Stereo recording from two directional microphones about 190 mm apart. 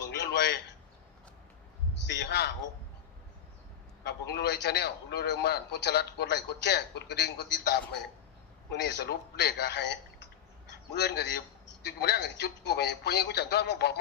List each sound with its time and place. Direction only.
0.1 s a sound: 65° left (ahead or behind)
2.0 s a man's voice: 60° left (ahead or behind)
4.0 s a man's voice: 60° left (ahead or behind)